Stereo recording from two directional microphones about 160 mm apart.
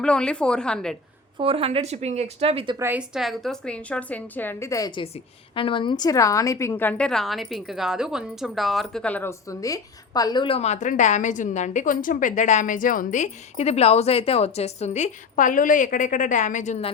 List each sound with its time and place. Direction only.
0.0 s a woman's voice: 5° left (ahead or behind)
1.4 s speech: 35° right (ahead or behind)
2.7 s a woman's voice: 10° right (ahead or behind); by 16.9 s 45° left (ahead or behind)